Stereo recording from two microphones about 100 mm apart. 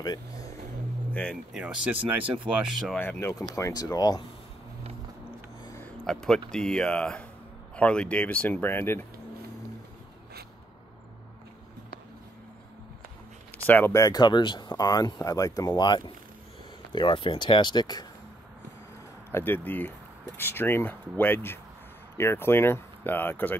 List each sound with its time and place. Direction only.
0.0 s vehicle: 40° left (ahead or behind)
1.1 s speech: 10° left (ahead or behind)
1.5 s speech: 10° right (ahead or behind)
2.0 s speech: 65° right (ahead or behind)
2.6 s speech: centre (ahead or behind)
3.0 s speech: 25° left (ahead or behind); by 4.2 s 40° left (ahead or behind)
6.0 s speech: 5° left (ahead or behind); by 9.0 s 20° left (ahead or behind)
13.7 s speech: 20° left (ahead or behind)
13.9 s speech: 40° left (ahead or behind)
16.9 s speech: 55° left (ahead or behind)
19.3 s speech: 20° left (ahead or behind)